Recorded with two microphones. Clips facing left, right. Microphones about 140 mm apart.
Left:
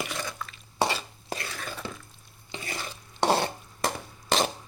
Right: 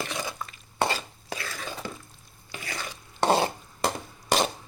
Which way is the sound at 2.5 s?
30° left (ahead or behind).